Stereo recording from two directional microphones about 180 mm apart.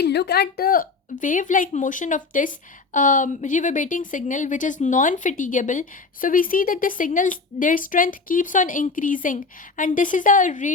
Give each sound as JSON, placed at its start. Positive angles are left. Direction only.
{"t": 0.0, "sound": "speech", "side_deg": 65}